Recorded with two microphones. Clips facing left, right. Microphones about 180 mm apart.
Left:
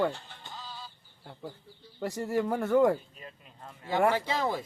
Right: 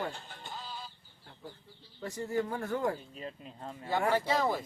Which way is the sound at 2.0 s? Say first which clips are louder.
Left 4 dB; 80° left.